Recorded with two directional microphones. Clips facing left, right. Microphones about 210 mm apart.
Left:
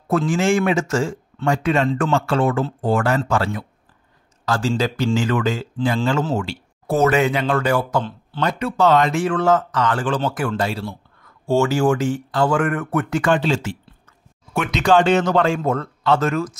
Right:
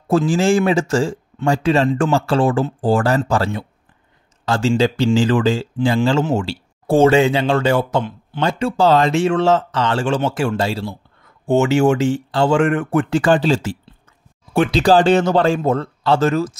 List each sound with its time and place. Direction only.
0.3 s speech: 30° right (ahead or behind)